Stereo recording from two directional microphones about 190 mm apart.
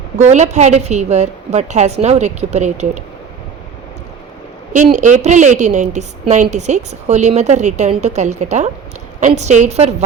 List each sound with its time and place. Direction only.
0.2 s a woman's voice: 35° right (ahead or behind)
4.7 s a woman's voice: 40° right (ahead or behind)